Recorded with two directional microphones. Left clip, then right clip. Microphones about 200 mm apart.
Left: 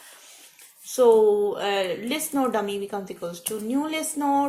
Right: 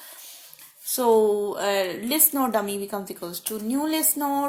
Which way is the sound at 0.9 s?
45° right (ahead or behind).